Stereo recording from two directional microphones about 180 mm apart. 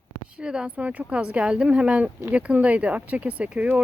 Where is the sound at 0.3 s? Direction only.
5° right (ahead or behind).